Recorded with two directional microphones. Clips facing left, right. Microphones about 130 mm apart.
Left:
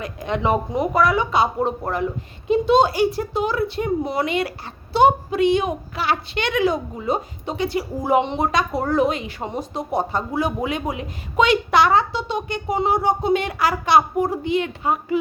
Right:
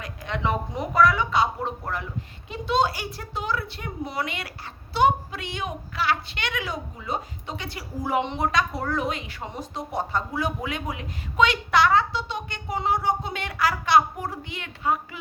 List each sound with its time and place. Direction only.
0.0 s a woman's voice: 20° left (ahead or behind)